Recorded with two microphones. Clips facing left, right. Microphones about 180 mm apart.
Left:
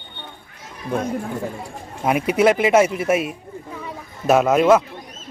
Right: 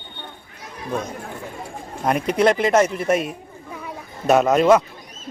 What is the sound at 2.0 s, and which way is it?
Speech, 5° left (ahead or behind).